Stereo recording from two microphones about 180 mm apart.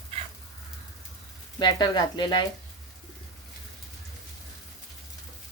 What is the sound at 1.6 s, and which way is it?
Speech, 25° left (ahead or behind).